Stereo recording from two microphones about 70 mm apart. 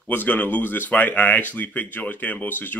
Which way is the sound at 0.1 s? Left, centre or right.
Left.